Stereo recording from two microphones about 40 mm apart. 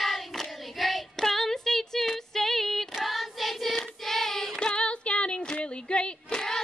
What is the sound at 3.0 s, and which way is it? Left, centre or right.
Child singing, centre.